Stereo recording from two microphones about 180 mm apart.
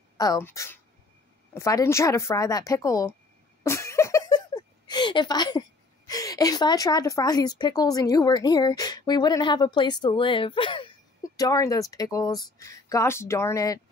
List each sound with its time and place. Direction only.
0.2 s speech: 15° left (ahead or behind)